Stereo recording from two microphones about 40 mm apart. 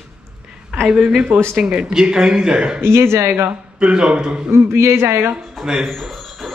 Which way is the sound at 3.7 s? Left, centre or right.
Right.